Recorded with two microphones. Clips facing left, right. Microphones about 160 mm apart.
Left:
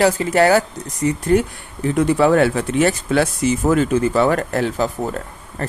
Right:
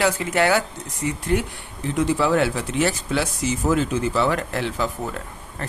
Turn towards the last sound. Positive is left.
turn(degrees=40)  # may be behind; listen again after turning